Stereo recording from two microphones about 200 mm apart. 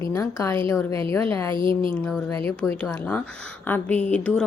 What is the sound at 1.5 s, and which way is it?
Speech, 25° right (ahead or behind).